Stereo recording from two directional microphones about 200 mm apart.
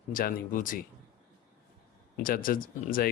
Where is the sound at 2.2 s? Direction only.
45° left (ahead or behind).